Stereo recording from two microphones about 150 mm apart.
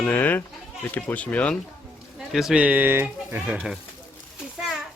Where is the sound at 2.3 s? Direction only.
5° right (ahead or behind).